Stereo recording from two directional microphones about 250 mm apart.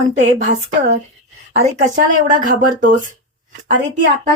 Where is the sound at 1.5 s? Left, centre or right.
Right.